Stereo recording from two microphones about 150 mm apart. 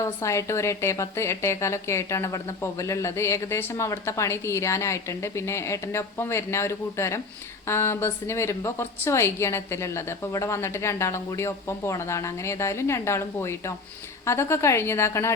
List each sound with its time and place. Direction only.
0.0 s a woman's voice: 20° left (ahead or behind)